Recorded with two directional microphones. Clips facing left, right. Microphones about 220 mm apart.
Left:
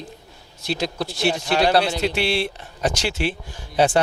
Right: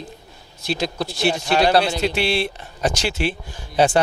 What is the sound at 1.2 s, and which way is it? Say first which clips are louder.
Speech: right 1 dB; 15° right (ahead or behind).